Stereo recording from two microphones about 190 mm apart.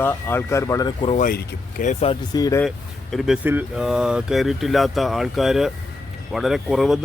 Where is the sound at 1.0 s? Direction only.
35° left (ahead or behind).